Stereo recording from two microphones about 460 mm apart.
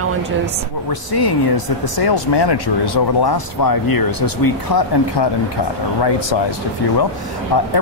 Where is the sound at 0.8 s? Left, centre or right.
Left.